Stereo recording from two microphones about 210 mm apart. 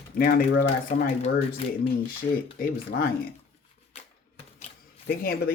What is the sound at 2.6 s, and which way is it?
Speech, 45° left (ahead or behind).